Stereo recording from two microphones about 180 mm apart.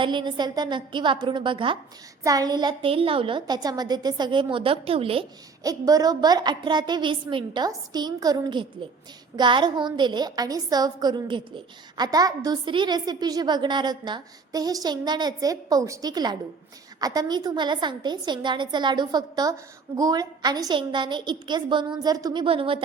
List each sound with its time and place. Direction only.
0.0 s a woman's voice: 25° right (ahead or behind)
5.6 s a woman's voice: 20° right (ahead or behind)